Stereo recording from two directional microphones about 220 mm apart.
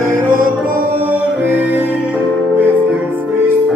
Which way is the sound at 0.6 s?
40° right (ahead or behind).